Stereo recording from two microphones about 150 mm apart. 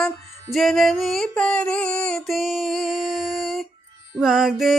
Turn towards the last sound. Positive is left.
turn(degrees=0)  # may be behind; listen again after turning